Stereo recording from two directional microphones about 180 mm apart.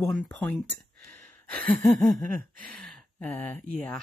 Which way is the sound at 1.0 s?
10° left (ahead or behind).